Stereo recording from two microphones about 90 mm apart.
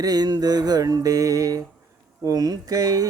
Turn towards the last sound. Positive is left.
turn(degrees=-45)  # may be behind; listen again after turning